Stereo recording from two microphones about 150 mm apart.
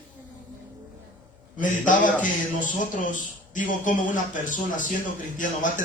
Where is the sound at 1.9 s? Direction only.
60° left (ahead or behind).